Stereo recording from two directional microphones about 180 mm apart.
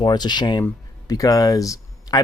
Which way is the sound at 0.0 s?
25° left (ahead or behind).